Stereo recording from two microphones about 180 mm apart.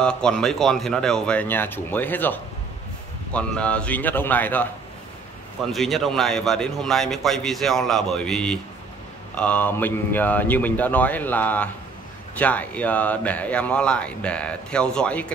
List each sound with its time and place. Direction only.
0.0 s speech: 5° left (ahead or behind)
5.7 s speech: centre (ahead or behind)